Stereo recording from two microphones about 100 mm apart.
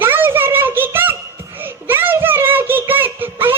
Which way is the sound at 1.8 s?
20° right (ahead or behind).